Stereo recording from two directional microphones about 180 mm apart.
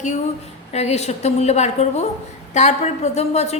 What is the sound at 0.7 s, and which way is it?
A woman's voice, 35° left (ahead or behind).